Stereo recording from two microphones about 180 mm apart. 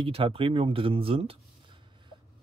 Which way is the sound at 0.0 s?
30° right (ahead or behind).